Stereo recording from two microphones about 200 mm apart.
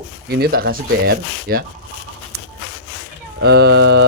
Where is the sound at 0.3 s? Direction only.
50° right (ahead or behind).